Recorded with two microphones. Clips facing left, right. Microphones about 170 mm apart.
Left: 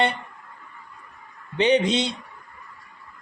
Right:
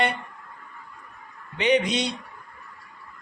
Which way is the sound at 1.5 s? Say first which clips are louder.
Left 2 dB; 30° left (ahead or behind).